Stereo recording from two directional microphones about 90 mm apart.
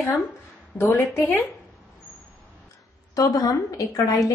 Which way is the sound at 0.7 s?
25° left (ahead or behind).